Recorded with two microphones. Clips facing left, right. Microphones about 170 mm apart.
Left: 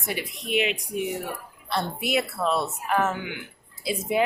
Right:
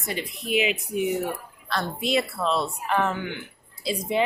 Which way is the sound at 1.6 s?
20° left (ahead or behind).